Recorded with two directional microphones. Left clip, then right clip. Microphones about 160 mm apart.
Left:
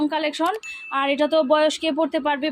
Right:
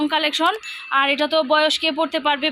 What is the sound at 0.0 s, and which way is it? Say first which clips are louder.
Speech: right 3 dB; 10° left (ahead or behind).